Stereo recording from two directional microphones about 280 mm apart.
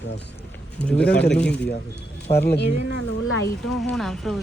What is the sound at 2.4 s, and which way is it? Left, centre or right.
Speech, left.